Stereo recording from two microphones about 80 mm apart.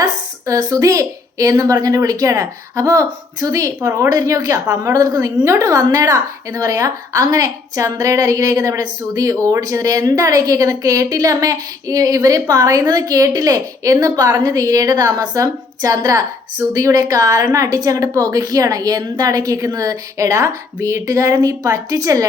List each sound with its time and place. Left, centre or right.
0.0 s a woman's voice: right